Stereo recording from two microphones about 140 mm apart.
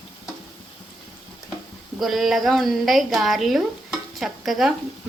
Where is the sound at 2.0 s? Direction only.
Centre (ahead or behind).